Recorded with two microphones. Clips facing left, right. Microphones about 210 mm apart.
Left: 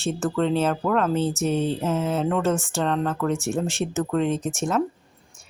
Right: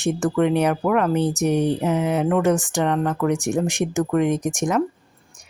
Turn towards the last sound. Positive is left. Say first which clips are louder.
# right 3 dB
turn(degrees=-15)  # may be behind; listen again after turning